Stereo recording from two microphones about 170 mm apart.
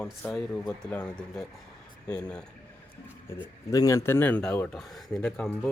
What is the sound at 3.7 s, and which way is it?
Speech, 20° left (ahead or behind).